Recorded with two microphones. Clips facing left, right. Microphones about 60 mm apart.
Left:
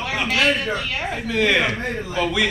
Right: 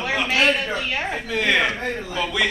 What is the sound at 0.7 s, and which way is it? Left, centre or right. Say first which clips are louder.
Speech: even; right.